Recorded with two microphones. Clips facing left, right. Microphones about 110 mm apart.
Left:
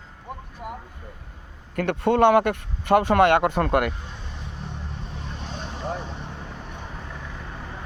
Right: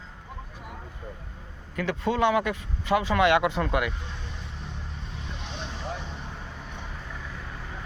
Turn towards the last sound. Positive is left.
turn(degrees=45)  # may be behind; listen again after turning